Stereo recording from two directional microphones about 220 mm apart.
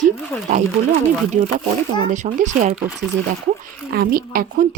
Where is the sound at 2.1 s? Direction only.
35° right (ahead or behind).